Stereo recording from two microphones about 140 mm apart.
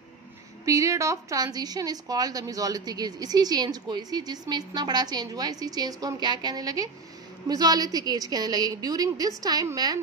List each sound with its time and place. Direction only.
0.7 s a woman's voice: 20° right (ahead or behind)